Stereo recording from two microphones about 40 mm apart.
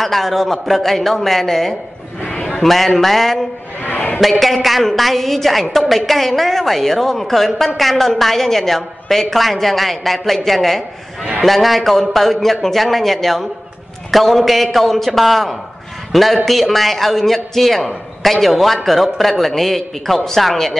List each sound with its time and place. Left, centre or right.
0.0 s a woman's voice: centre
3.8 s a sound: left
4.2 s a woman's voice: centre